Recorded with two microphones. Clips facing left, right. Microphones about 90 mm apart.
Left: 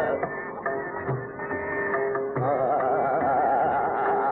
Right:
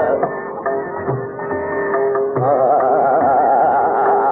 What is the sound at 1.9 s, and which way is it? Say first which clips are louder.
Music: right 11 dB; 40° right (ahead or behind).